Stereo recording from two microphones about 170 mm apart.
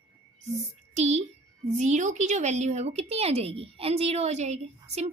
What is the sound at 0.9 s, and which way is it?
Speech, 40° right (ahead or behind).